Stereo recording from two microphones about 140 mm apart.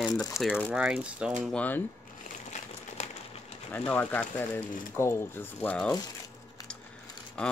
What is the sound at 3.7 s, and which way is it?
Speech, 10° left (ahead or behind).